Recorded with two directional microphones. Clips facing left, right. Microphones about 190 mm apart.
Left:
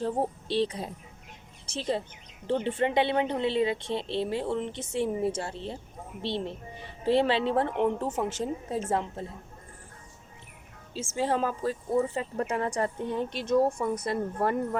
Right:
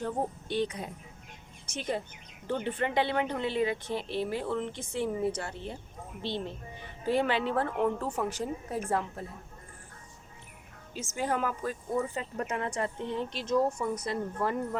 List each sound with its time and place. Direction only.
0.0 s a woman's voice: 30° left (ahead or behind)
6.8 s a woman's voice: 30° left (ahead or behind)
10.9 s speech: 30° left (ahead or behind); by 14.2 s 55° left (ahead or behind)